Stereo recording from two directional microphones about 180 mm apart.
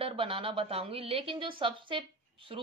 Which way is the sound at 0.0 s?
30° right (ahead or behind).